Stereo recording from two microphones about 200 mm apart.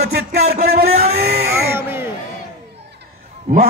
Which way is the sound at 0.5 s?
50° right (ahead or behind).